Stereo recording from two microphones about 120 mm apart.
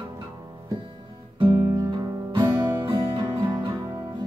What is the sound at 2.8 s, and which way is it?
Music, 40° right (ahead or behind).